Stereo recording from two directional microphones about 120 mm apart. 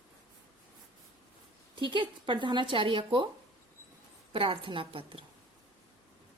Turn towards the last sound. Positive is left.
turn(degrees=-50)  # may be behind; listen again after turning